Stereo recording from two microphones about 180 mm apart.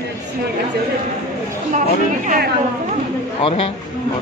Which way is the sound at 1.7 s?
45° right (ahead or behind).